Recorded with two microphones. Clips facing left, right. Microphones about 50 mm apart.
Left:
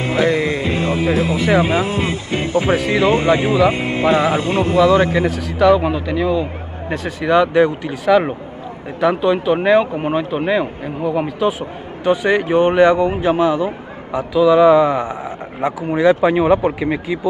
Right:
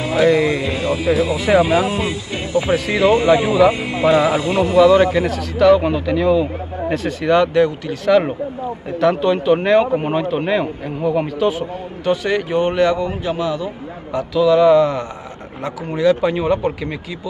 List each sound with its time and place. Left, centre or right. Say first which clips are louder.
0.0 s speech: right 2 dB; left
1.3 s speech: right 1 dB; centre
1.6 s speech: right 1 dB; left
5.1 s speech: left 1 dB; centre
7.4 s speech: left 1 dB; centre
8.1 s speech: even; centre
12.0 s speech: left 3 dB; centre
14.1 s speech: left 2 dB; centre